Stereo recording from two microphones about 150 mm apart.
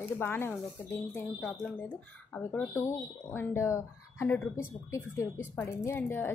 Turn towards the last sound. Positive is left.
turn(degrees=15)  # may be behind; listen again after turning